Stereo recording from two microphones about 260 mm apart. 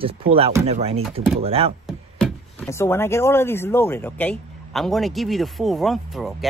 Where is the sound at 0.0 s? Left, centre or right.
Right.